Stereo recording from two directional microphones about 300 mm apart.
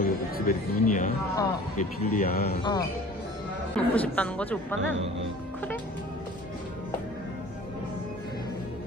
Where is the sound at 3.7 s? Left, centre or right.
Centre.